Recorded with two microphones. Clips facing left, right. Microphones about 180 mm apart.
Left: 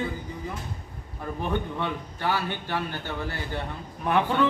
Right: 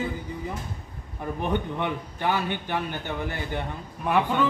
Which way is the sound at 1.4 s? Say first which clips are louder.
Right 2 dB; 15° right (ahead or behind).